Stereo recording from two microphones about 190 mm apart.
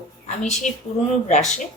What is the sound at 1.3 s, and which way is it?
Speech, 40° left (ahead or behind).